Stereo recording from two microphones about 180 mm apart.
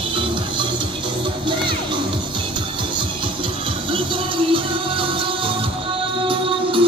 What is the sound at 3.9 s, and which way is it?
Music, 30° right (ahead or behind).